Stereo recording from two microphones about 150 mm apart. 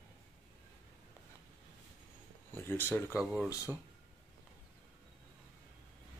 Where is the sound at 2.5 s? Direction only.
15° left (ahead or behind).